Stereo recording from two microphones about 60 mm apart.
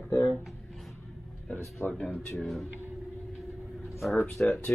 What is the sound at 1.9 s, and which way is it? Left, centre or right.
Speech, centre.